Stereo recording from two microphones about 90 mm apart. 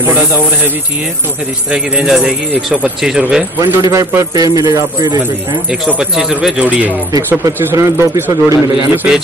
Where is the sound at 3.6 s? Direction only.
40° right (ahead or behind).